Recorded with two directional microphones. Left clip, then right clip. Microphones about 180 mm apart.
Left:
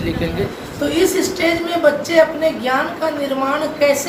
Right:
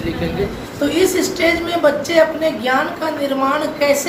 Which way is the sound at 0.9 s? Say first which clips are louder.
Even; 5° right (ahead or behind).